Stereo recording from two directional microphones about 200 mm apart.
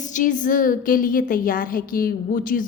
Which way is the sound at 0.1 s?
40° left (ahead or behind).